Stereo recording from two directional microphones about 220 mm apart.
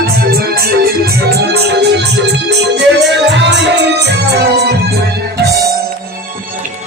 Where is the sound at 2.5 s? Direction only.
50° right (ahead or behind).